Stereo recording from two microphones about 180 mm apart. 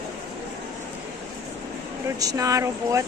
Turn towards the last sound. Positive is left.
turn(degrees=-15)  # may be behind; listen again after turning